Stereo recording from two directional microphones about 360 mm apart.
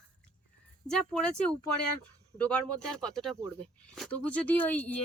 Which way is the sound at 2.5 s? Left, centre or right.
Centre.